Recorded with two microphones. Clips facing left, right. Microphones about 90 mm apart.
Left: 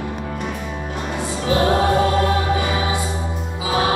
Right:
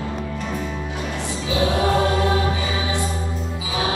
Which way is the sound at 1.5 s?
45° left (ahead or behind).